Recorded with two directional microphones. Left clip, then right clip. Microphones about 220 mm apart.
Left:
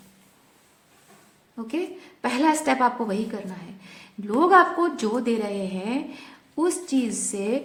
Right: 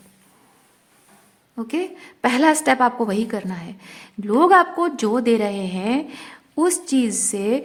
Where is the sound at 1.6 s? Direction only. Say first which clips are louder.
Right 4 dB; 30° right (ahead or behind).